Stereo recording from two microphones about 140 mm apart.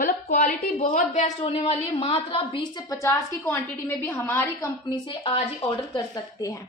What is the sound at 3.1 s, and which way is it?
A woman's voice, 15° left (ahead or behind).